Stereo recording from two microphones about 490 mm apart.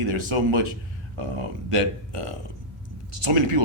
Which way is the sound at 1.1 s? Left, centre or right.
Right.